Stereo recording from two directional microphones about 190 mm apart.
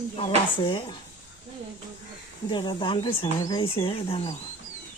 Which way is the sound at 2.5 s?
25° left (ahead or behind).